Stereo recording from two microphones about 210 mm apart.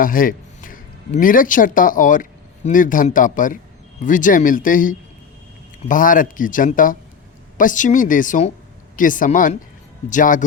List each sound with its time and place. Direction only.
0.0 s a man's voice: 40° left (ahead or behind)